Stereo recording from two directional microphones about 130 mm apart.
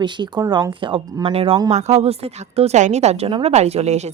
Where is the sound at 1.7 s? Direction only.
55° right (ahead or behind).